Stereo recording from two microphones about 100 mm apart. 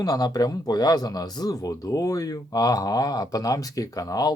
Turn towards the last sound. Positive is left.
turn(degrees=40)  # may be behind; listen again after turning